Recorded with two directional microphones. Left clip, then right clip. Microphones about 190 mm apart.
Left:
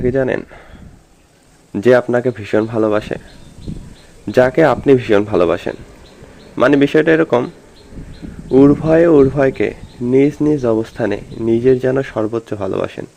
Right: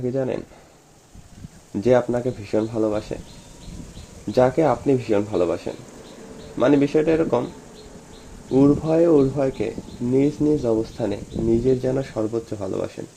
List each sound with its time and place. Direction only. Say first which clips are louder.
0.0 s speech: left 8 dB; 10° left (ahead or behind)
1.7 s speech: left 7 dB; 15° left (ahead or behind)
4.3 s speech: left 7 dB; 10° left (ahead or behind)
8.5 s speech: left 7 dB; 20° left (ahead or behind)